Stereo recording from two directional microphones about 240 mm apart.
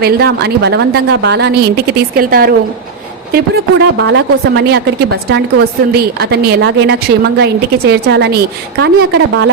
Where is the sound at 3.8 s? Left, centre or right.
Right.